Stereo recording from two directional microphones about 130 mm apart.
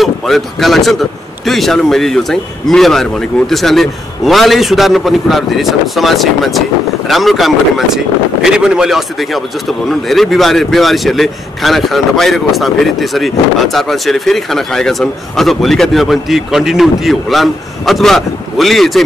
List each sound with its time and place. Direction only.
0.0 s speech: centre (ahead or behind)